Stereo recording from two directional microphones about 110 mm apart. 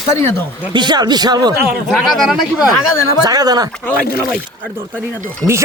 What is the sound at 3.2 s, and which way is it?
Speech, 35° right (ahead or behind).